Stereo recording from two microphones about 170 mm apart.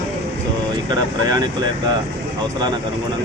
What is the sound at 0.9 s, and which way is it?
Speech, 25° right (ahead or behind).